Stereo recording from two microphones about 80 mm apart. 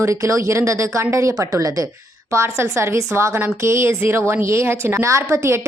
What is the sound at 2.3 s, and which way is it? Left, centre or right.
A woman's voice, right.